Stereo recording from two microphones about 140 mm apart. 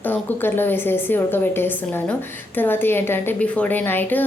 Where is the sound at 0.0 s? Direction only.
15° left (ahead or behind).